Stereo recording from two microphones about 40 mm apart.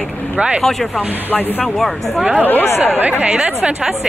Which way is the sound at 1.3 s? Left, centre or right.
Left.